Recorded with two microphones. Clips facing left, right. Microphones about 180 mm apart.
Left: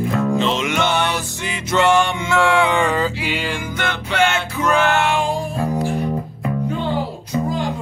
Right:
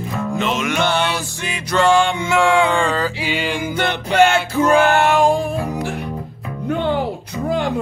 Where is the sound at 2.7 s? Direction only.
15° left (ahead or behind).